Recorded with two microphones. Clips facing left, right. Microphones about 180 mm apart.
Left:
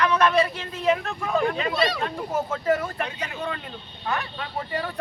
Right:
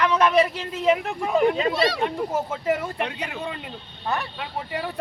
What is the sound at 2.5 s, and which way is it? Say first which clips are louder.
Speech: left 1 dB; 10° right (ahead or behind).